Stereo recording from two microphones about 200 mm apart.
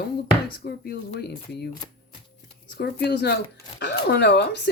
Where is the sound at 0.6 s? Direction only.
50° left (ahead or behind).